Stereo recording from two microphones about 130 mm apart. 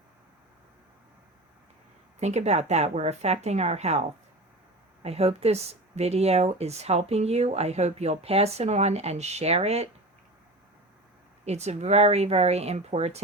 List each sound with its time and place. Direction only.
2.2 s speech: 60° right (ahead or behind)
5.0 s a woman's voice: 50° right (ahead or behind)
11.4 s speech: 55° right (ahead or behind)